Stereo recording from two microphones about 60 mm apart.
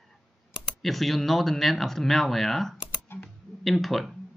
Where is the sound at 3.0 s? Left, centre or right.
Left.